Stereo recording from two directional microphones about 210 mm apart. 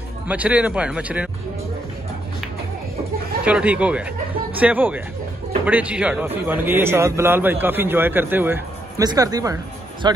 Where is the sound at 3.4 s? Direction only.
5° right (ahead or behind).